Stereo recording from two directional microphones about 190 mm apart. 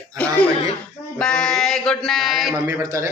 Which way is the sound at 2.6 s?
15° right (ahead or behind).